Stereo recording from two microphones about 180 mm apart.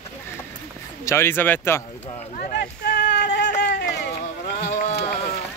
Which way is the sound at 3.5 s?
65° left (ahead or behind).